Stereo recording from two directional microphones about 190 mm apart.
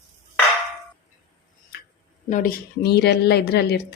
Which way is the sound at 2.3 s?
45° left (ahead or behind).